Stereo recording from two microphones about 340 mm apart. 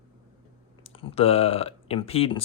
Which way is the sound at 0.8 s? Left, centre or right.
Centre.